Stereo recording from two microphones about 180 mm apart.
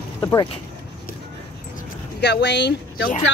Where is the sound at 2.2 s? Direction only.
70° left (ahead or behind).